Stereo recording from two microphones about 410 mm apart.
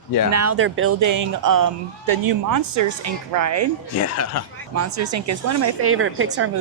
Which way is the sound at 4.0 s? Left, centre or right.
Left.